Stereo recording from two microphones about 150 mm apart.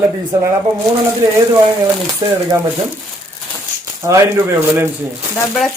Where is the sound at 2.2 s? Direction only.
30° right (ahead or behind).